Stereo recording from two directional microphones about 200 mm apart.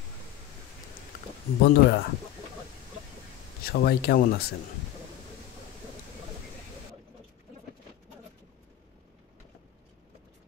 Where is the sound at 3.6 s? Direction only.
50° left (ahead or behind).